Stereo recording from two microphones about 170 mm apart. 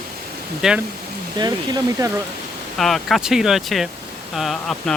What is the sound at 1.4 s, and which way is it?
Speech, 25° right (ahead or behind).